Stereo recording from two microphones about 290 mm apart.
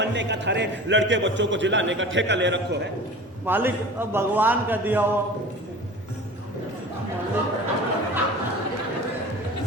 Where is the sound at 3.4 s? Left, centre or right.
Centre.